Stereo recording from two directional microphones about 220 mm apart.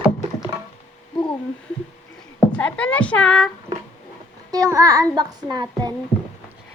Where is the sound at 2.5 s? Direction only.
5° left (ahead or behind).